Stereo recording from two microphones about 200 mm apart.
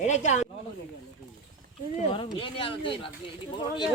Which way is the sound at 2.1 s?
25° left (ahead or behind).